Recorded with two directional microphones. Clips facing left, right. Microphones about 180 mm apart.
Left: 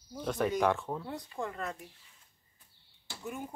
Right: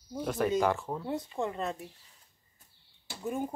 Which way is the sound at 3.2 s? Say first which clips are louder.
Right 7 dB; 35° right (ahead or behind).